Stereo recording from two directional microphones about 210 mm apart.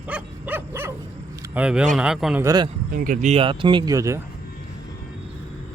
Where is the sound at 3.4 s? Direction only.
25° right (ahead or behind).